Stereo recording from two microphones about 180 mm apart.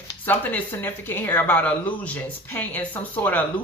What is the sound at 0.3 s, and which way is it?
Speech, 10° left (ahead or behind).